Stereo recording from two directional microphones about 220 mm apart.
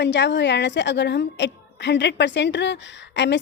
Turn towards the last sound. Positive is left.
turn(degrees=55)  # may be behind; listen again after turning